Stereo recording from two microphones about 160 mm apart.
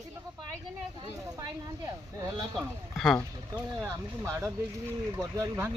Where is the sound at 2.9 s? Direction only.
Centre (ahead or behind).